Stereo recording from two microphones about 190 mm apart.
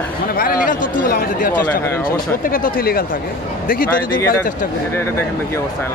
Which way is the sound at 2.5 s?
50° left (ahead or behind).